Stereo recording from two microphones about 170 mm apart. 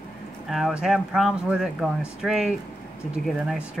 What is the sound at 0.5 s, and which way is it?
Speech, centre (ahead or behind).